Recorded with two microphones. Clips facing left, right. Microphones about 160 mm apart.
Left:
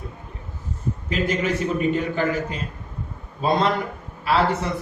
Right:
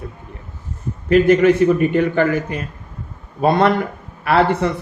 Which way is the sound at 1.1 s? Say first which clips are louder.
Right 12 dB; 60° right (ahead or behind).